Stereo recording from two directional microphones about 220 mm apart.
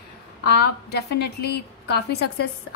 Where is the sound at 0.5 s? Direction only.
50° left (ahead or behind).